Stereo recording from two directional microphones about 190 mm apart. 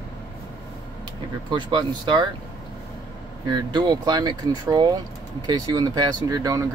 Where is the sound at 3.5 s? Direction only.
25° right (ahead or behind).